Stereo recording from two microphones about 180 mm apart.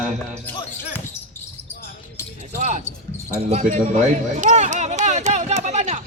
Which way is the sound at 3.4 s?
40° right (ahead or behind).